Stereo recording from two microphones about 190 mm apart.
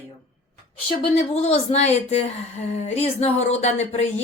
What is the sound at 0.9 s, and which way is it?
A woman's voice, 35° left (ahead or behind).